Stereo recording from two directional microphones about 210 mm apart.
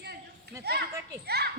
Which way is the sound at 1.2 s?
50° right (ahead or behind).